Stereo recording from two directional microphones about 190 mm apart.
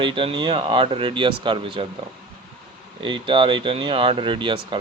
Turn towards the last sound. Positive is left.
turn(degrees=-25)  # may be behind; listen again after turning